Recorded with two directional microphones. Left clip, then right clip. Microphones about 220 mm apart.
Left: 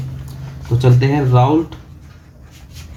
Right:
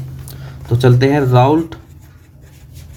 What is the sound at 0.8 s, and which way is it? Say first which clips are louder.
Speech: right 4 dB; 60° right (ahead or behind).